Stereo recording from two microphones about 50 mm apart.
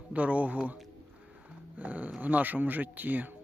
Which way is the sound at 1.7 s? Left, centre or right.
Right.